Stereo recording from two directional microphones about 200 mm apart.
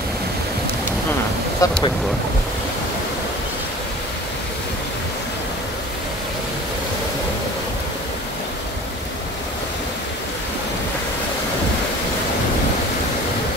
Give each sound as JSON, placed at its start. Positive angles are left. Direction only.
{"t": 1.6, "sound": "speech", "side_deg": 15}